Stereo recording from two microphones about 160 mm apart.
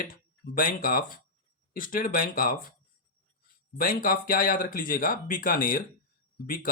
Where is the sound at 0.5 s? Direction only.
60° left (ahead or behind).